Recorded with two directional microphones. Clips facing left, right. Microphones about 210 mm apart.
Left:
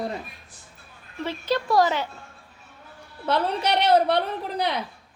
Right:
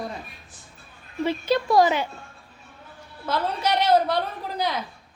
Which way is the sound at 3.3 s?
65° left (ahead or behind).